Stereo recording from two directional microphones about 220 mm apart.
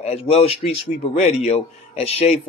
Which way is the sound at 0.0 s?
30° left (ahead or behind).